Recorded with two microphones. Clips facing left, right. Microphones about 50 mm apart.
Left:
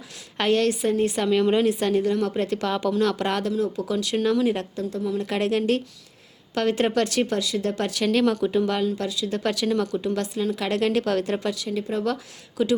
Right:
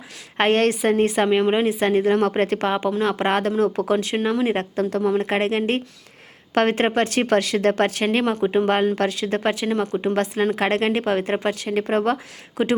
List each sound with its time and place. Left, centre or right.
0.3 s speech: right
2.0 s speech: right
4.1 s speech: right
4.8 s speech: right
9.4 s speech: right
11.4 s speech: right
12.0 s speech: right